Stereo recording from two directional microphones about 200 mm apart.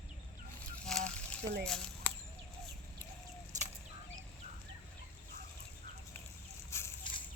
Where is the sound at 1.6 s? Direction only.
5° left (ahead or behind).